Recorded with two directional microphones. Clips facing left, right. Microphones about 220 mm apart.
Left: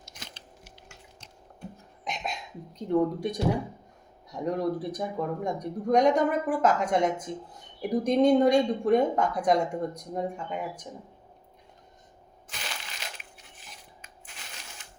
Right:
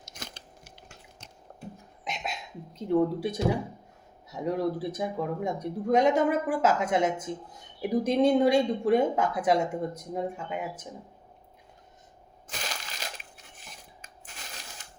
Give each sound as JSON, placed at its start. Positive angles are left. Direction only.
{"t": 0.0, "sound": "a sound", "side_deg": -45}
{"t": 2.0, "sound": "beatboxing", "side_deg": -5}
{"t": 2.7, "sound": "speech", "side_deg": -5}
{"t": 12.5, "sound": "crushing", "side_deg": -40}